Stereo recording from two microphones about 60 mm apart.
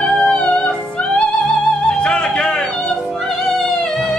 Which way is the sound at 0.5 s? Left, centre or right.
Left.